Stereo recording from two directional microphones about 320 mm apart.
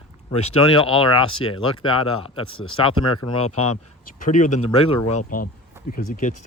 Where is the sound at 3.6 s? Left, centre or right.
Left.